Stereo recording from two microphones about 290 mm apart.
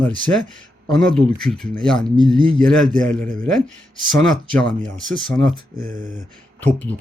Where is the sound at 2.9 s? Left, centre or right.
Right.